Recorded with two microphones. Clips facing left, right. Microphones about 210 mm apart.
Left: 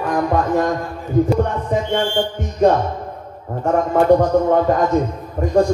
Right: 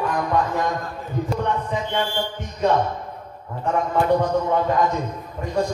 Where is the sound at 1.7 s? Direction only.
45° left (ahead or behind).